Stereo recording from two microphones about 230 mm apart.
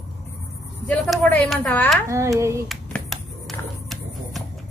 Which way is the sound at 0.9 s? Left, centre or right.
Centre.